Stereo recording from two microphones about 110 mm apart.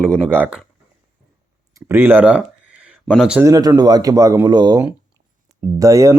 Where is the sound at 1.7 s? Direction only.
20° right (ahead or behind).